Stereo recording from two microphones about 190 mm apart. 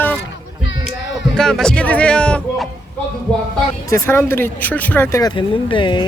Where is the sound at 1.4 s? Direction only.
Centre (ahead or behind).